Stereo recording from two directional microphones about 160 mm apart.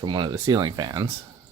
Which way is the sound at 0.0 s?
25° right (ahead or behind).